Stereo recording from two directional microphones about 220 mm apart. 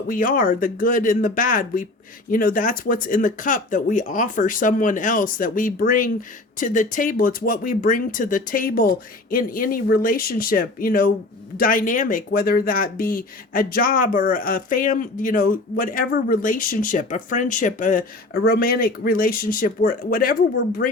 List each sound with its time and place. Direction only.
0.1 s speech: 40° left (ahead or behind)